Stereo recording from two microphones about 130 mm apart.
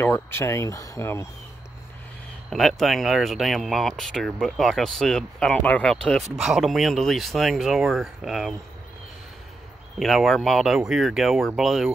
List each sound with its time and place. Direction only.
0.0 s speech: 20° left (ahead or behind)
2.5 s speech: centre (ahead or behind)
9.9 s speech: centre (ahead or behind)